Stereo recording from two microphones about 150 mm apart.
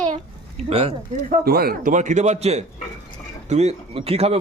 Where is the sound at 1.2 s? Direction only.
90° right.